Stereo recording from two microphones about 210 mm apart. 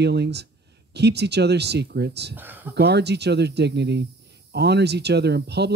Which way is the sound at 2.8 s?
50° right (ahead or behind).